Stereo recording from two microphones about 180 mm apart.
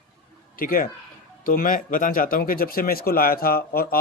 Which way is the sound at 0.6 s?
55° left (ahead or behind).